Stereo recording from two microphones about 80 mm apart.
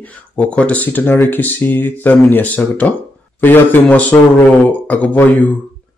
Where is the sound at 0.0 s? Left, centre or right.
Centre.